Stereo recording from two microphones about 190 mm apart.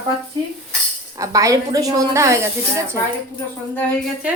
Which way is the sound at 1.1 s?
20° right (ahead or behind).